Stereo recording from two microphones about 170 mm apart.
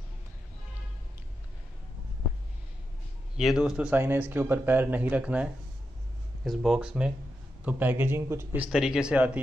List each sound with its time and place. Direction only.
3.3 s speech: centre (ahead or behind)
8.7 s speech: 5° right (ahead or behind)